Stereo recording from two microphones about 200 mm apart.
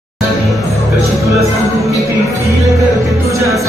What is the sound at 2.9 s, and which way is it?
Music, 15° right (ahead or behind).